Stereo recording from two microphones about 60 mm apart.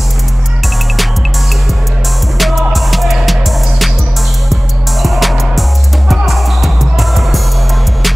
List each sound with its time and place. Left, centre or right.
2.3 s music: centre
5.0 s music: centre